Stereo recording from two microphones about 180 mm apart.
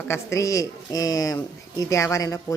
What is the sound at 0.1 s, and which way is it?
A woman's voice, 15° left (ahead or behind).